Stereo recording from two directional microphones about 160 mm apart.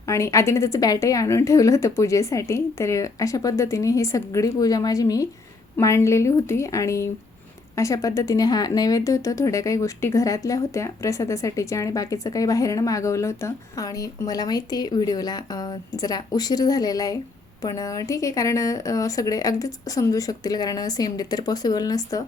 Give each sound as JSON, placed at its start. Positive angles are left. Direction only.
{"t": 0.1, "sound": "speech", "side_deg": 20}